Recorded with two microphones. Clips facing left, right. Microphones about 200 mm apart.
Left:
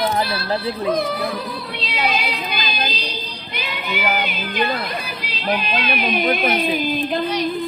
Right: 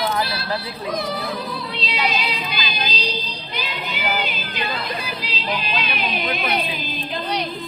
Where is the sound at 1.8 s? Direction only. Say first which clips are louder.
Left 2 dB; 50° left (ahead or behind).